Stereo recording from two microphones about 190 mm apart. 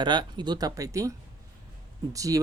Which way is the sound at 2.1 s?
15° right (ahead or behind).